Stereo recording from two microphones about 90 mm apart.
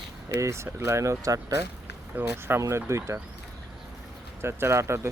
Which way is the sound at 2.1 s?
25° right (ahead or behind).